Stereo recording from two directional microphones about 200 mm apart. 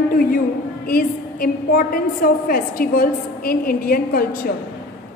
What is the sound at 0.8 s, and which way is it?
A woman's voice, 45° left (ahead or behind).